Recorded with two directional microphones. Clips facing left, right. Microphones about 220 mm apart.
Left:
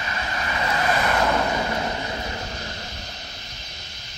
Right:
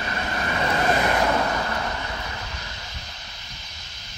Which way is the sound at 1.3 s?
10° left (ahead or behind).